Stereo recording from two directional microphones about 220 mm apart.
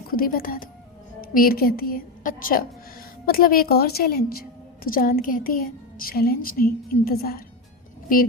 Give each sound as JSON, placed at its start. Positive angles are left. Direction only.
{"t": 0.1, "sound": "a woman's voice", "side_deg": 40}